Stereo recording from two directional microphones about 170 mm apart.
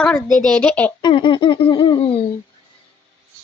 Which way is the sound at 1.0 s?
30° left (ahead or behind).